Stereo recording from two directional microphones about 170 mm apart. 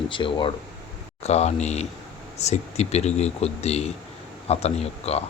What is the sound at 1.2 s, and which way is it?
Speech, 40° left (ahead or behind).